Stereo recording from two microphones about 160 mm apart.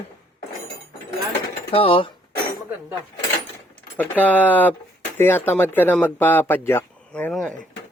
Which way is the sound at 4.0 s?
10° left (ahead or behind).